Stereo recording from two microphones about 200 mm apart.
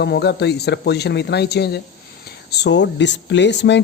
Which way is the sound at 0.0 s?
55° left (ahead or behind).